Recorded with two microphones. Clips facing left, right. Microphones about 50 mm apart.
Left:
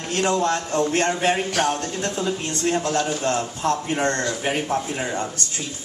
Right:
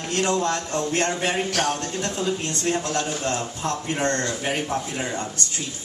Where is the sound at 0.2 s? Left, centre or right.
Left.